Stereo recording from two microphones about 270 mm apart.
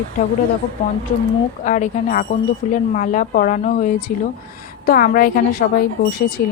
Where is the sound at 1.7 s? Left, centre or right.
Left.